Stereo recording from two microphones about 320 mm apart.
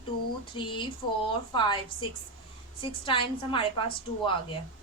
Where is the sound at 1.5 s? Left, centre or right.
Centre.